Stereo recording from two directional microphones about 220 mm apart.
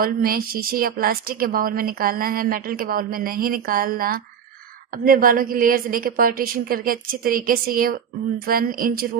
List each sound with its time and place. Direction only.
0.0 s a woman's voice: 40° right (ahead or behind)